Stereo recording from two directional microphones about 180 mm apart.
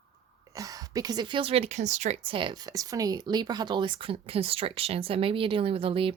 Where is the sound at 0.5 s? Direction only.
20° right (ahead or behind).